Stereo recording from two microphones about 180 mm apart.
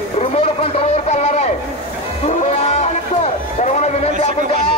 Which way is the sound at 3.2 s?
40° left (ahead or behind).